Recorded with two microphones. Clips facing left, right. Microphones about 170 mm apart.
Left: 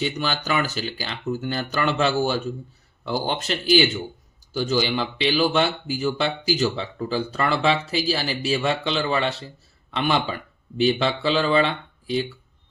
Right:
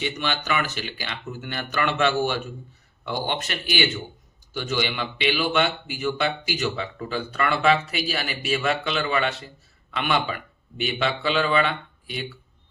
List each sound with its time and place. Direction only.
0.0 s speech: 35° left (ahead or behind)
4.5 s speech: 35° left (ahead or behind)